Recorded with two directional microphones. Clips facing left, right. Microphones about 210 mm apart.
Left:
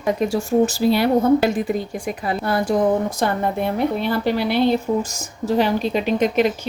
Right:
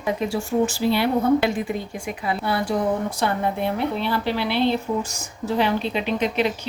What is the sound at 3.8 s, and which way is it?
A woman's voice, 45° left (ahead or behind).